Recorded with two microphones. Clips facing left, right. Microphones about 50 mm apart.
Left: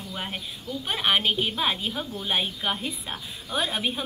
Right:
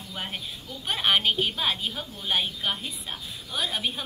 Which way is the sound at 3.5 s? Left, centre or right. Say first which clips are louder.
Left 3 dB; left.